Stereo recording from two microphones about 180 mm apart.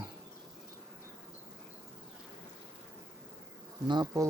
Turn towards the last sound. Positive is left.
turn(degrees=-25)  # may be behind; listen again after turning